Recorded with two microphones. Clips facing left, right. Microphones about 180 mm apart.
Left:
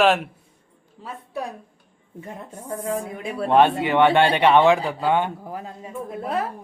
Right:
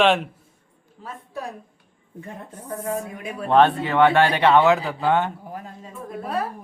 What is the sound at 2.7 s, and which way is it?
Speech, 30° left (ahead or behind).